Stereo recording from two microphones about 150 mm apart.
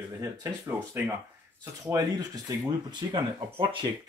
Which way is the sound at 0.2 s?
20° right (ahead or behind).